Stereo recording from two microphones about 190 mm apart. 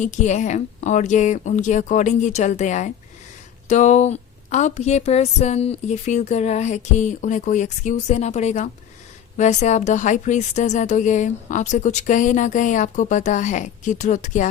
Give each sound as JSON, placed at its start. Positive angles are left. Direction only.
{"t": 0.0, "sound": "a woman's voice", "side_deg": 40}